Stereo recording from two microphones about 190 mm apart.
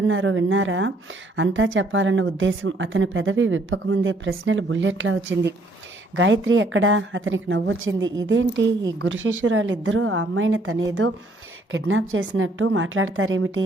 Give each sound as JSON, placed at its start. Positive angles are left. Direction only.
{"t": 0.1, "sound": "a woman's voice", "side_deg": -90}
{"t": 8.3, "sound": "a woman's voice", "side_deg": -75}
{"t": 9.0, "sound": "a woman's voice", "side_deg": -90}